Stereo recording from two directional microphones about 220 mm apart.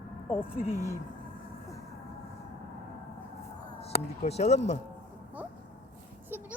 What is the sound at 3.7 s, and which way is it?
Speech, 30° left (ahead or behind).